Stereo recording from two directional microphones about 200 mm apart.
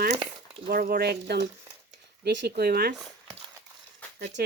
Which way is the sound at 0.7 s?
50° right (ahead or behind).